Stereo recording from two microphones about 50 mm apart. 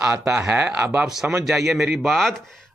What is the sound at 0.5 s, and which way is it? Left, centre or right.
Speech, right.